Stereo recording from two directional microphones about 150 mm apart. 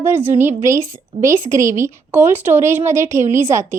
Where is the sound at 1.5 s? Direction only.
60° right (ahead or behind).